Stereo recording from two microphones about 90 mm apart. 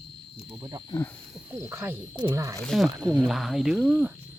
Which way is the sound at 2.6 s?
Centre (ahead or behind).